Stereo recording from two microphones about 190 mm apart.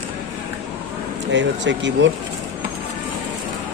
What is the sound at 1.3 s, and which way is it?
Speech, 70° right (ahead or behind).